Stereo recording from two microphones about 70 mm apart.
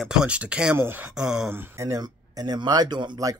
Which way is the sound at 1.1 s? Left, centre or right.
Centre.